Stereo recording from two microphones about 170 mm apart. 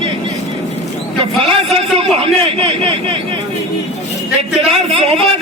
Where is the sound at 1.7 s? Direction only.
35° right (ahead or behind).